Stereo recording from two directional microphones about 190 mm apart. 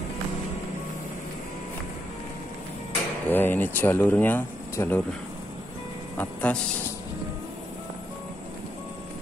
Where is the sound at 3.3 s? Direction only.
10° left (ahead or behind).